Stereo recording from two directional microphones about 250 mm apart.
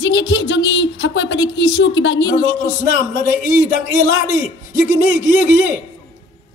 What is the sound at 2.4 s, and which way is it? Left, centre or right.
Speech, centre.